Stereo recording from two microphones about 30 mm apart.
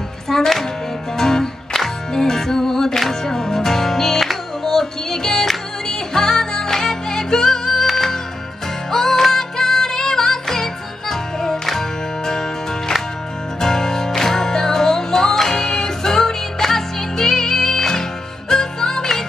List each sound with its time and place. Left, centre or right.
0.3 s music: centre
8.9 s music: centre